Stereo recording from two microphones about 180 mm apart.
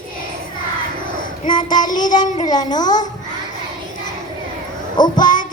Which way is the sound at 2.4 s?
20° left (ahead or behind).